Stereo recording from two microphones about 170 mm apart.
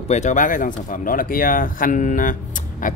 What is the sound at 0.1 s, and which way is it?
A man's voice, 45° left (ahead or behind).